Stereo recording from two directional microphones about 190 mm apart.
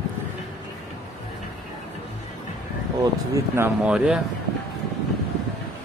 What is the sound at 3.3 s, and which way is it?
Speech, 15° right (ahead or behind).